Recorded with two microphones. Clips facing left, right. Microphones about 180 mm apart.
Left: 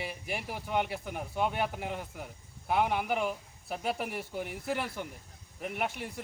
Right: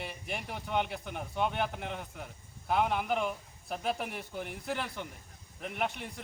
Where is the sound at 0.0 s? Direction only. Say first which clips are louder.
Left 2 dB; 5° left (ahead or behind).